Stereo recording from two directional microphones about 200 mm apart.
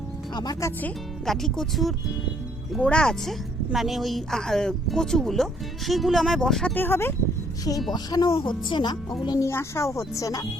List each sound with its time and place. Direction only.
0.3 s speech: 20° left (ahead or behind)
0.8 s speech: 5° left (ahead or behind)
7.9 s speech: 20° left (ahead or behind)